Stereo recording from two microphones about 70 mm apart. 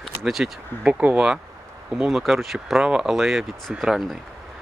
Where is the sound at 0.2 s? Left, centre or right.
Centre.